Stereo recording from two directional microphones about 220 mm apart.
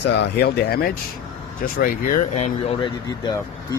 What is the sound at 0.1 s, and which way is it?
Speech, 50° left (ahead or behind).